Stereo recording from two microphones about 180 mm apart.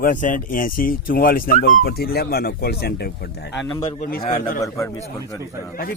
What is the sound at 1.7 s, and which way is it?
Speech, 60° left (ahead or behind).